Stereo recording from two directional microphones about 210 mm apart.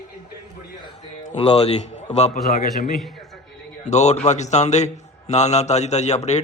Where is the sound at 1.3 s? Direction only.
30° left (ahead or behind).